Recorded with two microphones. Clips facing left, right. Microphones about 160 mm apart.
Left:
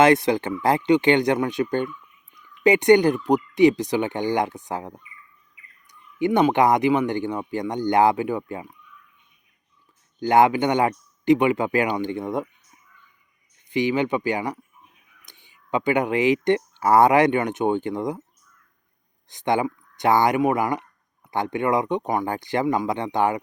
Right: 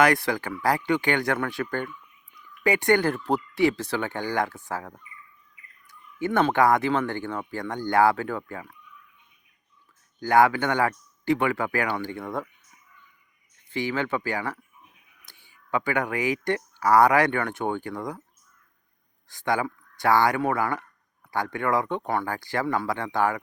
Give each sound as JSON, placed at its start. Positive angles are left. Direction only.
{"t": 0.0, "sound": "speech", "side_deg": 20}
{"t": 10.2, "sound": "speech", "side_deg": 20}
{"t": 13.7, "sound": "speech", "side_deg": 15}
{"t": 19.3, "sound": "speech", "side_deg": 20}